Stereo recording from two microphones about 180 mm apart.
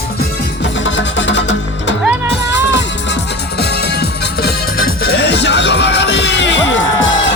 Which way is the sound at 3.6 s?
65° left (ahead or behind).